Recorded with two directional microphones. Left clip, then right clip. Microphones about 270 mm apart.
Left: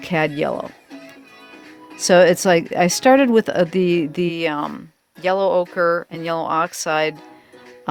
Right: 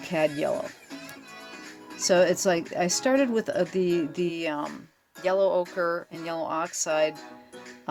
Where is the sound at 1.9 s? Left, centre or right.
Left.